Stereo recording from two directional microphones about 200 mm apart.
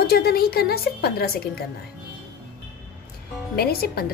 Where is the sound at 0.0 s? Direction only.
50° left (ahead or behind).